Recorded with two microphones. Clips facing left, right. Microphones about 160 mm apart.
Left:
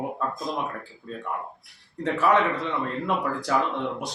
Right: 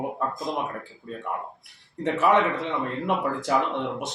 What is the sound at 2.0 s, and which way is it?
A man's voice, 20° right (ahead or behind).